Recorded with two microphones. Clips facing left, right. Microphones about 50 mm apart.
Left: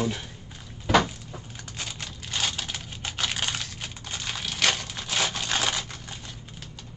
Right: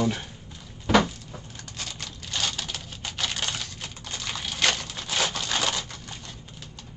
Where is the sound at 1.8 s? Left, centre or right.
Centre.